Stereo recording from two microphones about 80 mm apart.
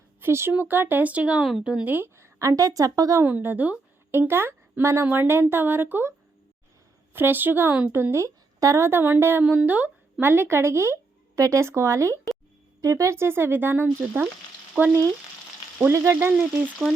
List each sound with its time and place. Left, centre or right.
0.2 s speech: right
2.1 s a woman's voice: right
3.2 s a woman's voice: right
15.9 s frying: right
16.3 s frying: centre
16.6 s speech: right